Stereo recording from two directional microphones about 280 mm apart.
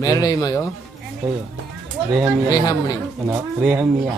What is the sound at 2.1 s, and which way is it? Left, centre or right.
Speech, centre.